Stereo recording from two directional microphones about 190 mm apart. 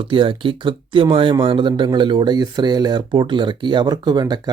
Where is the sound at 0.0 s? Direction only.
25° right (ahead or behind).